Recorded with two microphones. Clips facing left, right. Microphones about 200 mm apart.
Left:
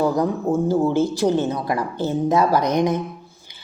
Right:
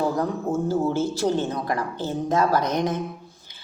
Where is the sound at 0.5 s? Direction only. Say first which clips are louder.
Left 5 dB; 55° left (ahead or behind).